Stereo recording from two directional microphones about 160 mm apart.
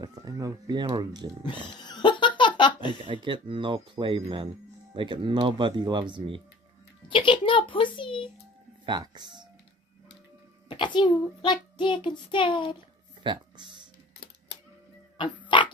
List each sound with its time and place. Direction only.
0.0 s speech: 25° right (ahead or behind)
1.4 s a sound: 30° left (ahead or behind)
3.1 s speech: 30° right (ahead or behind)
7.1 s a child's voice: 30° left (ahead or behind)
8.8 s speech: 25° right (ahead or behind)
10.7 s a child's voice: 30° left (ahead or behind)
13.2 s a sound: 30° right (ahead or behind)
15.4 s pig: 30° left (ahead or behind)